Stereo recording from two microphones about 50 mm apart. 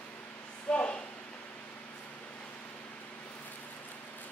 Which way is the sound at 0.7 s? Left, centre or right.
Left.